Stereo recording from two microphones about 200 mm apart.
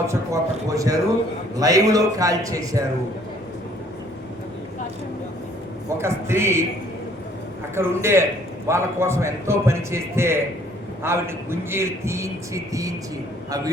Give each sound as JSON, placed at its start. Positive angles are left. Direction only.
{"t": 0.1, "sound": "a man's voice", "side_deg": -15}
{"t": 6.0, "sound": "a man's voice", "side_deg": -15}
{"t": 7.8, "sound": "a man's voice", "side_deg": -10}